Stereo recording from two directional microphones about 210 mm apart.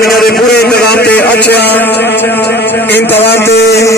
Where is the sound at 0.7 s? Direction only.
50° left (ahead or behind).